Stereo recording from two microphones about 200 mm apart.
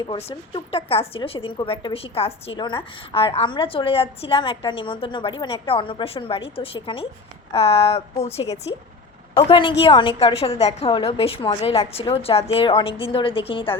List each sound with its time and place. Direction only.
0.0 s a woman's voice: 25° left (ahead or behind)